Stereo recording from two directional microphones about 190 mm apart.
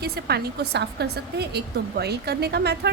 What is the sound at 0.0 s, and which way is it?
A woman's voice, 60° right (ahead or behind).